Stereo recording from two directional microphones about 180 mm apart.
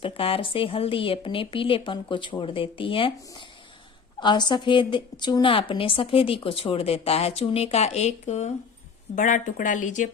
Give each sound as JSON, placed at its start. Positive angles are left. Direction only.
{"t": 0.0, "sound": "a woman's voice", "side_deg": 30}